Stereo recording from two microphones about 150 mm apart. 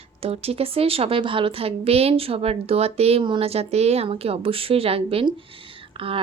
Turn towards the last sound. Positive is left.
turn(degrees=-35)  # may be behind; listen again after turning